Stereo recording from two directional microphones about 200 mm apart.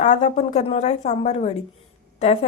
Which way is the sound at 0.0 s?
35° left (ahead or behind).